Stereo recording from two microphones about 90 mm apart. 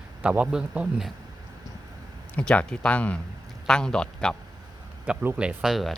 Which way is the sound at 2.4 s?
10° left (ahead or behind).